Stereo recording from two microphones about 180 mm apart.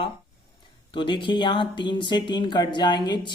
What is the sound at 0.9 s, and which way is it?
A man's voice, 25° left (ahead or behind).